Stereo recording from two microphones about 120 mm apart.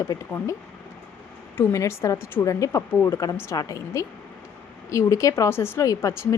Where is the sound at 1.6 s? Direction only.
20° left (ahead or behind).